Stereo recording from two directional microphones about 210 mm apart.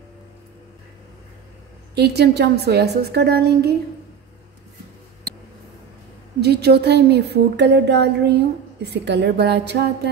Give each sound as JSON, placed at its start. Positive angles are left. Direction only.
{"t": 2.0, "sound": "speech", "side_deg": -50}
{"t": 6.4, "sound": "speech", "side_deg": -50}